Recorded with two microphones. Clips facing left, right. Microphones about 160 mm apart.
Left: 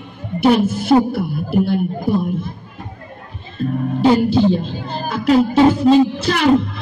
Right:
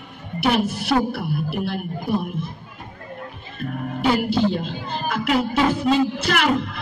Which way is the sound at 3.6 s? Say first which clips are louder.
Left 8 dB; 30° left (ahead or behind).